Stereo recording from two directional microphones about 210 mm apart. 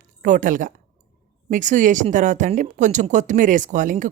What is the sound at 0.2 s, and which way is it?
Speech, 40° right (ahead or behind).